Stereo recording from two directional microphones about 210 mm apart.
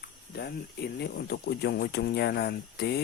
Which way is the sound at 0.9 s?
50° left (ahead or behind).